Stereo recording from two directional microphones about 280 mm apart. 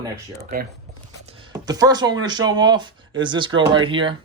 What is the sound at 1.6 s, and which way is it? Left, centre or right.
Speech, centre.